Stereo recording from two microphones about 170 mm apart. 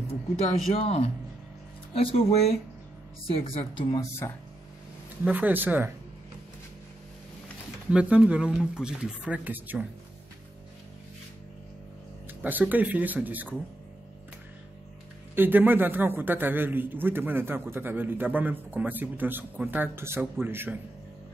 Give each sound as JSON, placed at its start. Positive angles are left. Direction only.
{"t": 0.7, "sound": "speech", "side_deg": 35}
{"t": 5.2, "sound": "a man's voice", "side_deg": -10}
{"t": 7.9, "sound": "a man's voice", "side_deg": -5}
{"t": 12.3, "sound": "a man's voice", "side_deg": -10}
{"t": 15.3, "sound": "a man's voice", "side_deg": -10}